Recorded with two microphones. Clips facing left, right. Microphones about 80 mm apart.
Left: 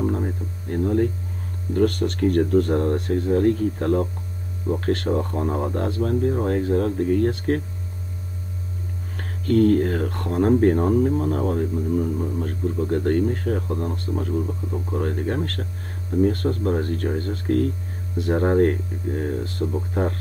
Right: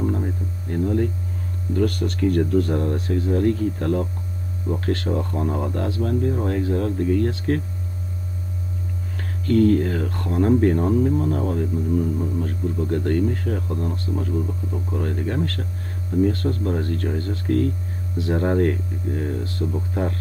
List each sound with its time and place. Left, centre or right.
0.0 s a sound: left
1.7 s speech: left
3.0 s speech: left
9.1 s speech: left
18.3 s speech: left